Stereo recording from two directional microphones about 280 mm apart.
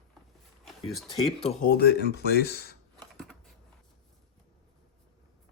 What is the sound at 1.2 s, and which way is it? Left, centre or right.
Speech, left.